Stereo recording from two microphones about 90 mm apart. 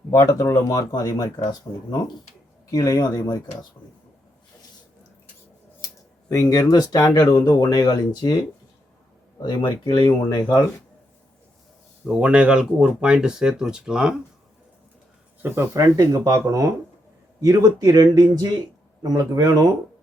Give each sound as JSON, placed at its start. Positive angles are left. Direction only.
{"t": 0.1, "sound": "speech", "side_deg": 35}
{"t": 5.8, "sound": "speech", "side_deg": 35}
{"t": 9.4, "sound": "speech", "side_deg": 60}
{"t": 12.0, "sound": "speech", "side_deg": -10}
{"t": 15.4, "sound": "speech", "side_deg": -25}
{"t": 15.7, "sound": "speech", "side_deg": -40}